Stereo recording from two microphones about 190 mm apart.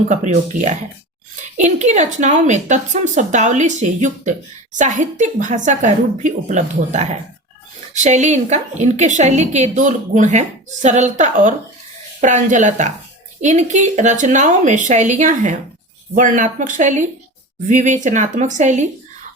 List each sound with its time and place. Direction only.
0.5 s speech: 5° right (ahead or behind)
1.5 s a woman's voice: 40° right (ahead or behind)